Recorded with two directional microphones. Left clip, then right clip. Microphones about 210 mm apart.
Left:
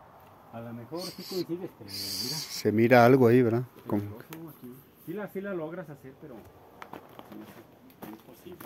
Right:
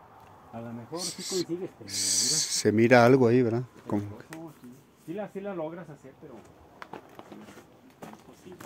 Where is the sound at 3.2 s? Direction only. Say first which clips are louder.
Left 1 dB; 10° left (ahead or behind).